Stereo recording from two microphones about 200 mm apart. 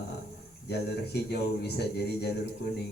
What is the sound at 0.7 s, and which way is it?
A man's voice, 55° left (ahead or behind).